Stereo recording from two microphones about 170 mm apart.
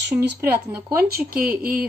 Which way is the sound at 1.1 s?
60° right (ahead or behind).